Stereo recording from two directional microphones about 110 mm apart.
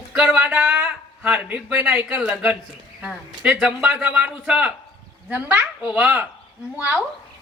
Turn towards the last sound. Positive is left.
turn(degrees=-20)  # may be behind; listen again after turning